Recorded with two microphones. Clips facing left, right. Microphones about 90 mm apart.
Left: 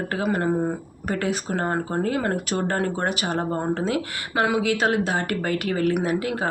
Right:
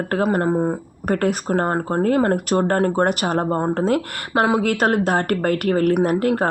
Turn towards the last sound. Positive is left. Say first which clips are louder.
# right 6 dB
turn(degrees=-50)  # may be behind; listen again after turning